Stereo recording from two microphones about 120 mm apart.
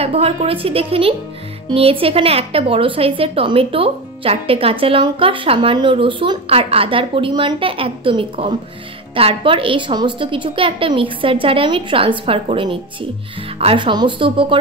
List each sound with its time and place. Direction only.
0.0 s a woman's voice: 55° right (ahead or behind)